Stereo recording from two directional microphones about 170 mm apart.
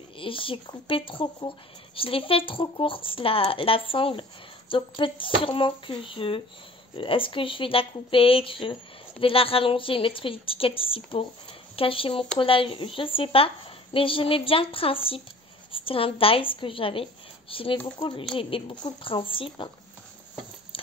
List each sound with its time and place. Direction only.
0.2 s speech: 30° left (ahead or behind)